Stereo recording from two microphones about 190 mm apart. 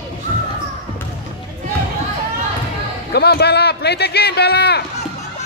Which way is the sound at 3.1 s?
60° left (ahead or behind).